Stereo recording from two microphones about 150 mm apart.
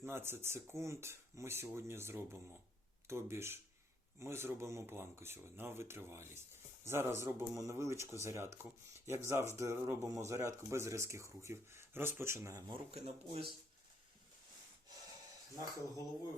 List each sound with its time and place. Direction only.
0.0 s speech: 15° right (ahead or behind)
12.9 s speech: 45° right (ahead or behind)